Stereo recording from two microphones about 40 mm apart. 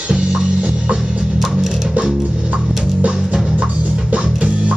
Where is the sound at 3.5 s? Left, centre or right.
Right.